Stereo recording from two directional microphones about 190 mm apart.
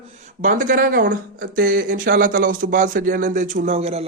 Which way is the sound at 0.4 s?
45° right (ahead or behind).